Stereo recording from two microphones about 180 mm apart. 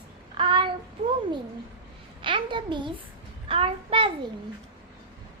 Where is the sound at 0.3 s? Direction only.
30° right (ahead or behind).